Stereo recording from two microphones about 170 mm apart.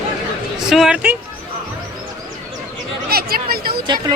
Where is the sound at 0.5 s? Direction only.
Centre (ahead or behind).